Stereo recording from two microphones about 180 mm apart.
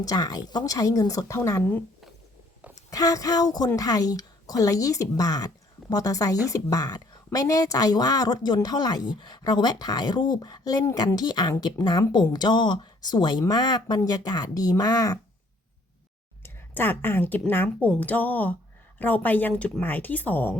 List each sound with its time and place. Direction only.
0.0 s speech: 20° left (ahead or behind)
2.9 s speech: 20° left (ahead or behind)
16.4 s speech: 10° left (ahead or behind)